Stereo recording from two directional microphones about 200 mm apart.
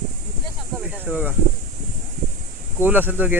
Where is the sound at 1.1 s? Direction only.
10° right (ahead or behind).